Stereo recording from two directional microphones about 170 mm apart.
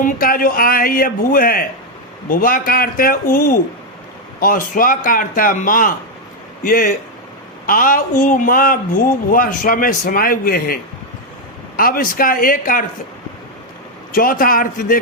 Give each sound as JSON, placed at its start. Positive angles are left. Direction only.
{"t": 0.0, "sound": "a man's voice", "side_deg": 55}
{"t": 11.8, "sound": "speech", "side_deg": 55}
{"t": 14.1, "sound": "speech", "side_deg": 55}